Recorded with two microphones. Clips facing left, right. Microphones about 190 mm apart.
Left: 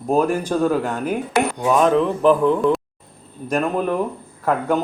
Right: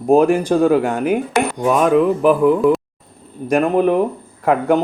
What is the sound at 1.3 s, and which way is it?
Dishes, 70° right (ahead or behind).